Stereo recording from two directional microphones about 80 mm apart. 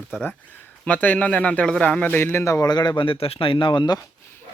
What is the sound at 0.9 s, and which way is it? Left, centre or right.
Speech, centre.